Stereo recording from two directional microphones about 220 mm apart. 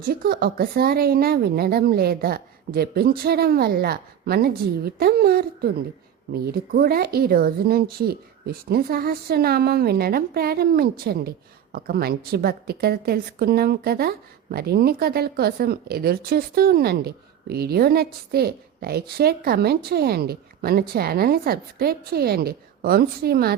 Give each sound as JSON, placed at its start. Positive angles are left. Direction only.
{"t": 0.0, "sound": "speech", "side_deg": -45}